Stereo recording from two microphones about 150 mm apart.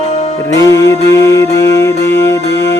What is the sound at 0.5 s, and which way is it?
Music, 20° left (ahead or behind).